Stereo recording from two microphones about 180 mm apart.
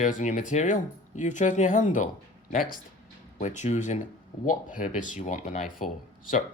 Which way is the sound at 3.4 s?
40° left (ahead or behind).